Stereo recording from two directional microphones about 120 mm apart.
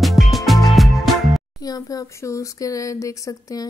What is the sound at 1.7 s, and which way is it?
Speech, 30° left (ahead or behind).